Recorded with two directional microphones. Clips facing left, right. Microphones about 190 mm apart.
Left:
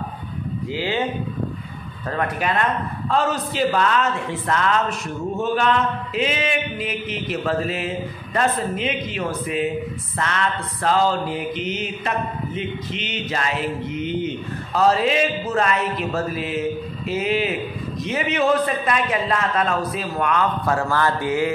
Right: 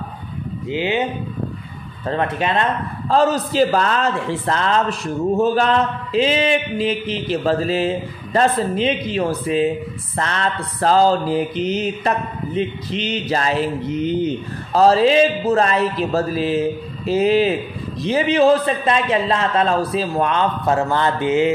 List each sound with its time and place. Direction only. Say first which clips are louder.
0.7 s a man's voice: right 4 dB; 20° right (ahead or behind)
2.0 s a man's voice: right 3 dB; 25° right (ahead or behind)
3.1 s a man's voice: right 6 dB; 35° right (ahead or behind)